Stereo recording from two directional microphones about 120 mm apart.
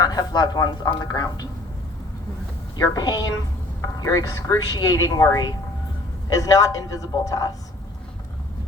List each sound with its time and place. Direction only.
0.0 s speech: 35° left (ahead or behind)
2.7 s a woman's voice: 30° left (ahead or behind)